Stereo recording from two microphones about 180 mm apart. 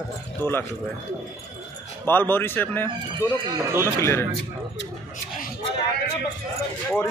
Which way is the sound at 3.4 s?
15° right (ahead or behind).